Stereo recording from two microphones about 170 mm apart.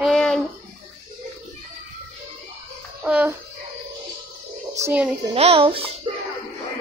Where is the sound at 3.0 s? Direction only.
10° right (ahead or behind).